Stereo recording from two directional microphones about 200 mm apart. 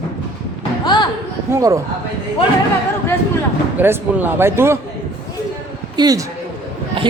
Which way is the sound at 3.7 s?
10° right (ahead or behind).